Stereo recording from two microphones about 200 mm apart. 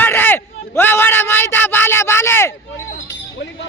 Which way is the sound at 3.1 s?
65° left (ahead or behind).